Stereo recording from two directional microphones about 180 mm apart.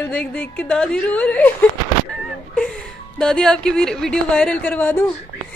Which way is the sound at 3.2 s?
5° left (ahead or behind).